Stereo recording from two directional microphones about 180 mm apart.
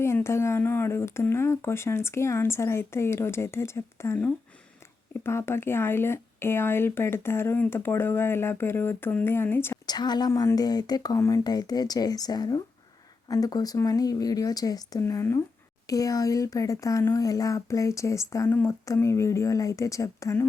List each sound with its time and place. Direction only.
0.0 s speech: 15° left (ahead or behind)